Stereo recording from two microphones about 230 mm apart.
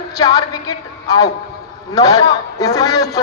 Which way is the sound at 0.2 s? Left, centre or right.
Centre.